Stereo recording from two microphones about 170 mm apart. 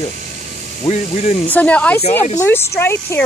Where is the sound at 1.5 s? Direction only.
10° left (ahead or behind).